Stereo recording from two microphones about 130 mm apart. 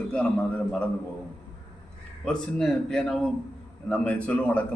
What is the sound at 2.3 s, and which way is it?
A man's voice, 5° left (ahead or behind).